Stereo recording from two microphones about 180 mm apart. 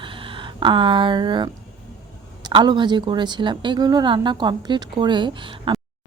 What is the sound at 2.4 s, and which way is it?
A woman's voice, 25° right (ahead or behind).